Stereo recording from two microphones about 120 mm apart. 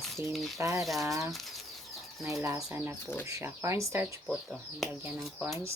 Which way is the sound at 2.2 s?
25° right (ahead or behind).